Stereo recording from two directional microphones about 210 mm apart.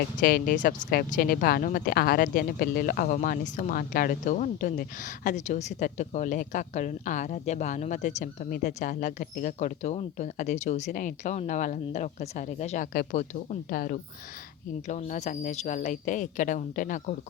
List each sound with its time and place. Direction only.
0.2 s speech: 45° left (ahead or behind)